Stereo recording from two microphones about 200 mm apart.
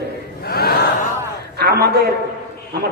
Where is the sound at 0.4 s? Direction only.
50° left (ahead or behind).